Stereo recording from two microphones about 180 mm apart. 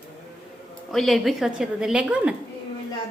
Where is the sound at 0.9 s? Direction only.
Centre (ahead or behind).